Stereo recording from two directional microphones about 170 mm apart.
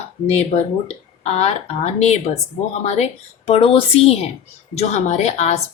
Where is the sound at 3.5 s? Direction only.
35° left (ahead or behind).